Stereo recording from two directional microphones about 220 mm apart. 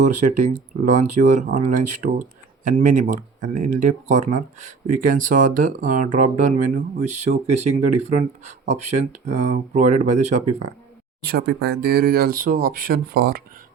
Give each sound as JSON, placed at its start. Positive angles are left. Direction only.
{"t": 0.0, "sound": "speech", "side_deg": -35}
{"t": 11.2, "sound": "speech", "side_deg": -45}